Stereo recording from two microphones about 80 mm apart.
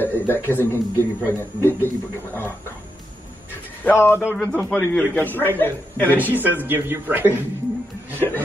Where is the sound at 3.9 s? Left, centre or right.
Left.